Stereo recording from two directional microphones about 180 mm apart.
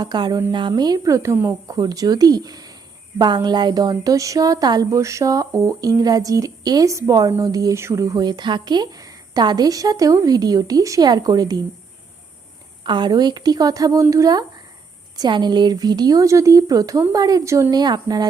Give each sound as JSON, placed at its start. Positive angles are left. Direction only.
{"t": 0.0, "sound": "speech", "side_deg": -25}
{"t": 12.8, "sound": "speech", "side_deg": -25}